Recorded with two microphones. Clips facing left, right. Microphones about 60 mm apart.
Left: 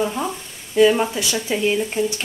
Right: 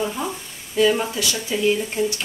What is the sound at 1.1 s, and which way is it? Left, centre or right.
Speech, left.